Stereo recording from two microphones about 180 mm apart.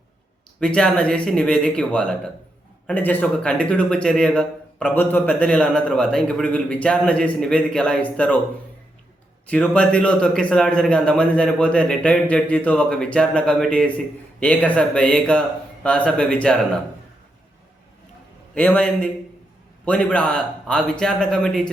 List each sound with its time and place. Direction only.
0.6 s a man's voice: 5° left (ahead or behind)
9.5 s a man's voice: 5° left (ahead or behind)
18.5 s a man's voice: 10° left (ahead or behind)